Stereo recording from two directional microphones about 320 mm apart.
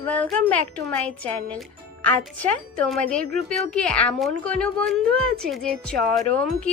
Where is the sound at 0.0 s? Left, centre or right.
Centre.